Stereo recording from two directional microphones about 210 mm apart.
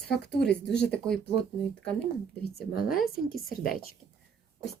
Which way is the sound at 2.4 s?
45° left (ahead or behind).